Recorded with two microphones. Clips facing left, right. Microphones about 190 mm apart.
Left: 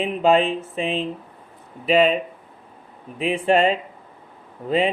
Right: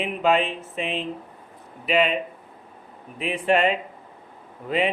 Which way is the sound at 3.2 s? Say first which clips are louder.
Left 3 dB; 35° left (ahead or behind).